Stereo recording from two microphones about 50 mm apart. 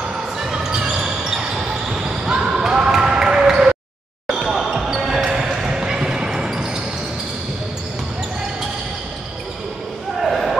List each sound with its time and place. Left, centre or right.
0.5 s basketball bounce: centre
10.2 s basketball bounce: centre